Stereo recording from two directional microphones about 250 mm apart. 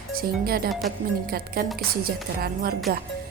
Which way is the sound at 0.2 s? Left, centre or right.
Right.